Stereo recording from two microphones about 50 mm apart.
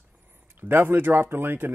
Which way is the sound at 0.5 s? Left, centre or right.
Right.